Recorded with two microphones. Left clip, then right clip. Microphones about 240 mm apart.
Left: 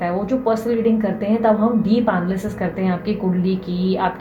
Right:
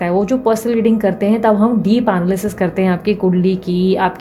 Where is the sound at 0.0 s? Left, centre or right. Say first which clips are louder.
Right 5 dB; right.